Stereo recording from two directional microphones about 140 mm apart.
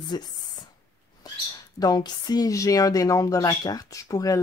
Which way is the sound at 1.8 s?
25° left (ahead or behind).